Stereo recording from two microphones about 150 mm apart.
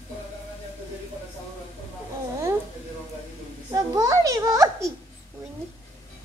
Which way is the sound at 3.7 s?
20° right (ahead or behind).